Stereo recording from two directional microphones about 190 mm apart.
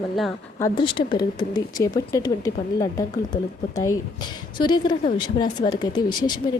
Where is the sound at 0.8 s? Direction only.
25° left (ahead or behind).